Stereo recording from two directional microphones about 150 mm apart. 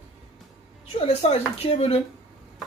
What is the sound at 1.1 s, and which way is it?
Speech, 45° left (ahead or behind).